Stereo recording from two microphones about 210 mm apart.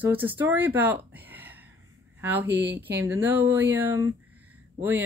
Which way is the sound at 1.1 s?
10° right (ahead or behind).